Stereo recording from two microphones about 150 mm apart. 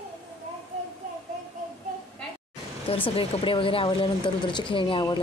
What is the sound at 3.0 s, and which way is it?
Speech, 35° left (ahead or behind).